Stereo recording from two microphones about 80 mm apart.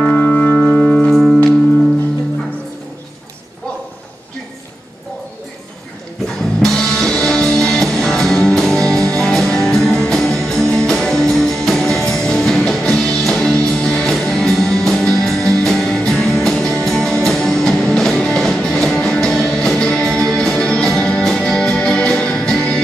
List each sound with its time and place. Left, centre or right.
0.1 s music: centre
6.2 s music: centre